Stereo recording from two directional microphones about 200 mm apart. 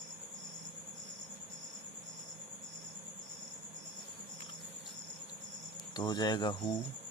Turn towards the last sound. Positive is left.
turn(degrees=20)  # may be behind; listen again after turning